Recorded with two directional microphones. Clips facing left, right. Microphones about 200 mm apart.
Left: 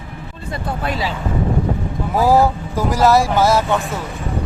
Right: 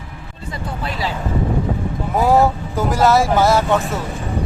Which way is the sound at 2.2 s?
Centre (ahead or behind).